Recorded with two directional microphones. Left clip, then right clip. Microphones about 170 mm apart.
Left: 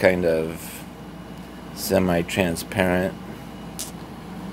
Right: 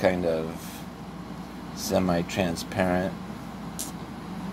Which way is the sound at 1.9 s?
55° left (ahead or behind).